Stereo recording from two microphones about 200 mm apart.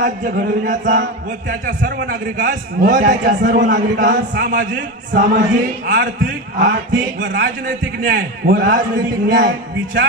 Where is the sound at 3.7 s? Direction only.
60° right (ahead or behind).